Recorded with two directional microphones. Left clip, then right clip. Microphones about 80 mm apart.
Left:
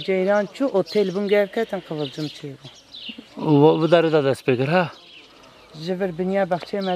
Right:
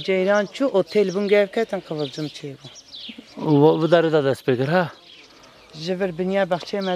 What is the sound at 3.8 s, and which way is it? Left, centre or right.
A man's voice, centre.